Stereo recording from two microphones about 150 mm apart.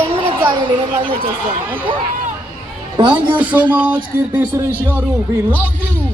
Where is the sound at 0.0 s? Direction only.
35° right (ahead or behind).